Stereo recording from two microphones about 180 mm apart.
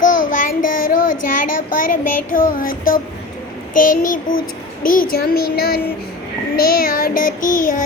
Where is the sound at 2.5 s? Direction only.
50° left (ahead or behind).